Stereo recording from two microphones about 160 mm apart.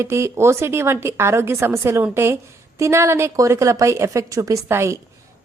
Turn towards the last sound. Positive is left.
turn(degrees=-15)  # may be behind; listen again after turning